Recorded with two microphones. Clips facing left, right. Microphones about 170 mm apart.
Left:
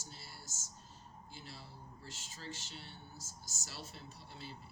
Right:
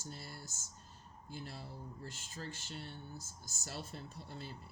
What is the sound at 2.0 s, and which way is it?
Speech, 55° right (ahead or behind).